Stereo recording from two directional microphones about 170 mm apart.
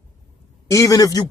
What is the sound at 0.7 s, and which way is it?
Speech, 20° left (ahead or behind).